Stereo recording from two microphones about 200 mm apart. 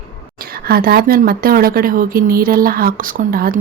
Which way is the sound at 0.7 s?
50° right (ahead or behind).